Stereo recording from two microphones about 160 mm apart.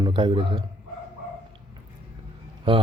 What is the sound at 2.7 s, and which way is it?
Speech, 30° right (ahead or behind).